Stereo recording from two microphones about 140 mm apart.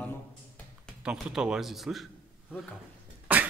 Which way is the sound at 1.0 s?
5° right (ahead or behind).